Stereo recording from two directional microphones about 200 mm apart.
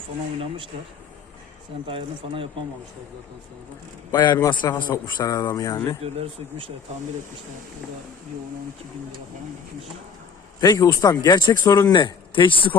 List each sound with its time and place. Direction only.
0.3 s speech: 25° right (ahead or behind)
1.9 s speech: 25° right (ahead or behind)
4.1 s a man's voice: 20° left (ahead or behind)
6.0 s speech: 30° right (ahead or behind)
10.6 s a man's voice: 15° left (ahead or behind)